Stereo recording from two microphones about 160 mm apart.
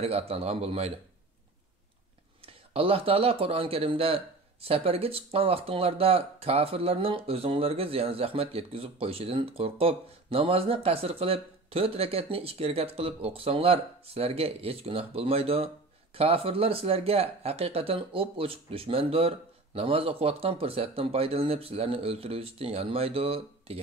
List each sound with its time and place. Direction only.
0.0 s speech: 40° right (ahead or behind)
2.4 s speech: 35° right (ahead or behind)